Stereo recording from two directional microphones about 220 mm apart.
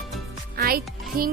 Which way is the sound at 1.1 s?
40° right (ahead or behind).